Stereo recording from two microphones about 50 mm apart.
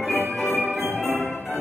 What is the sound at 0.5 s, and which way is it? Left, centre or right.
Music, right.